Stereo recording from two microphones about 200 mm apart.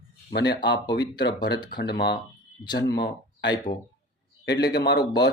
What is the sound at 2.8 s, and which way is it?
Speech, 55° left (ahead or behind).